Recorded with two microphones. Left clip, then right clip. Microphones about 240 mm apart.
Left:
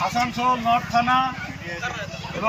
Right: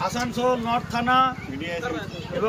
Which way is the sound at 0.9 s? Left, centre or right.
Centre.